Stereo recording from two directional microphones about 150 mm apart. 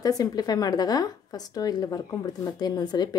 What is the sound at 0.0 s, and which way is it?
Speech, 25° left (ahead or behind).